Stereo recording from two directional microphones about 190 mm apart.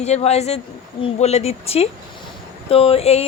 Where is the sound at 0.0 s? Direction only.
35° left (ahead or behind).